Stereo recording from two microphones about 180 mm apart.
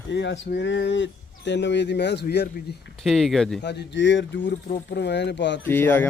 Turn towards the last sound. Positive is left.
turn(degrees=10)  # may be behind; listen again after turning